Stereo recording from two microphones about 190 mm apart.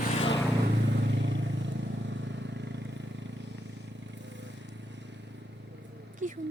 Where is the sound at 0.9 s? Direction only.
65° right (ahead or behind).